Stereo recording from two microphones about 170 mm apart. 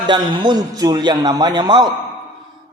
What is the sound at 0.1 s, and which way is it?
A man's voice, 25° right (ahead or behind).